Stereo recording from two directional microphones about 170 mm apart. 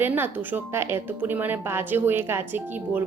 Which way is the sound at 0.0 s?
10° right (ahead or behind).